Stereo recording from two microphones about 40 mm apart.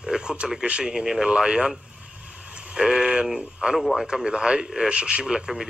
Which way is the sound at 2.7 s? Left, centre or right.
Centre.